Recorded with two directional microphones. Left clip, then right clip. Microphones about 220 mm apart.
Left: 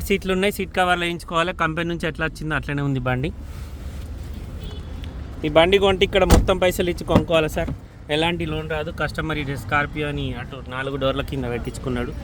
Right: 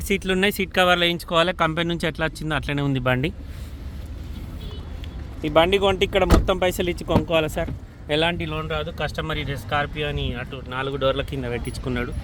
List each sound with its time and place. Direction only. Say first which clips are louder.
0.1 s speech: even; centre (ahead or behind)
5.4 s speech: left 2 dB; 5° left (ahead or behind)